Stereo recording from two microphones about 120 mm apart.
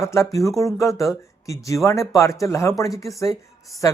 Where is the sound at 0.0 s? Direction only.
25° left (ahead or behind).